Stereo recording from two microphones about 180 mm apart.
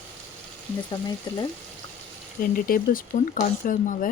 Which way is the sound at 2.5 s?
50° left (ahead or behind).